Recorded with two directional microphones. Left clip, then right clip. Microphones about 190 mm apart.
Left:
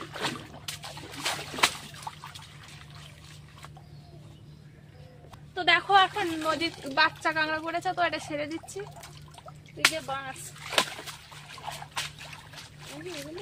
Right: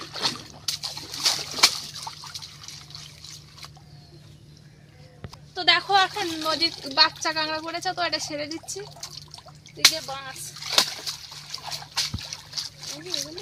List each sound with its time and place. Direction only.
0.0 s a sound: 5° right (ahead or behind)
5.5 s speech: centre (ahead or behind)
9.7 s water: centre (ahead or behind)